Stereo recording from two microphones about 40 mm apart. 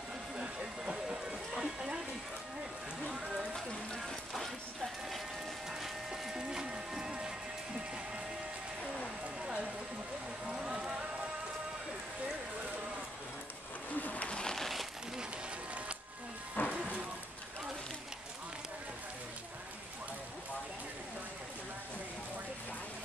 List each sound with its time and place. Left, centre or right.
1.6 s music: centre
5.7 s music: centre
10.5 s run: centre
13.9 s pigeon: left
14.5 s crumpling: centre
16.6 s music: left